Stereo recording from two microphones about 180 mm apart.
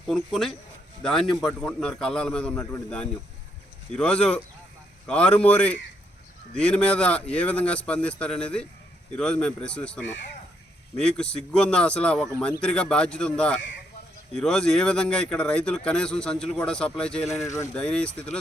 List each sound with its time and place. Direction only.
0.1 s speech: centre (ahead or behind)
17.4 s speech: 15° left (ahead or behind)
17.7 s speech: 5° left (ahead or behind)